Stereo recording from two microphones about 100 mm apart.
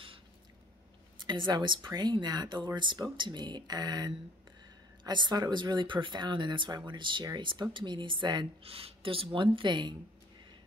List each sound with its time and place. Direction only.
1.2 s speech: 50° right (ahead or behind)
8.6 s speech: 70° right (ahead or behind); by 9.9 s 50° right (ahead or behind)